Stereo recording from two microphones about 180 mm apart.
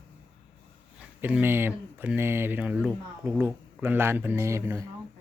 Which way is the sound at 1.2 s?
10° right (ahead or behind).